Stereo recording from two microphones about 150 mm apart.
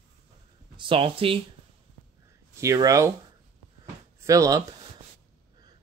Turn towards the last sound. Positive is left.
turn(degrees=-20)  # may be behind; listen again after turning